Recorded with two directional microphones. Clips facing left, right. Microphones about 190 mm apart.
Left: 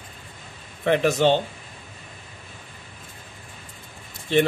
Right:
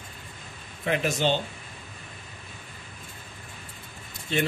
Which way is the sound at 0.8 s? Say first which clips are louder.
Left 7 dB; 65° left (ahead or behind).